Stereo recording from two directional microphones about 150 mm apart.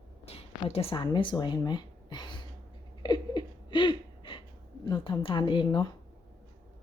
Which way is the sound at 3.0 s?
30° left (ahead or behind).